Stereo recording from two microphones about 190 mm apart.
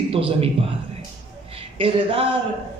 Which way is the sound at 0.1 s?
30° right (ahead or behind).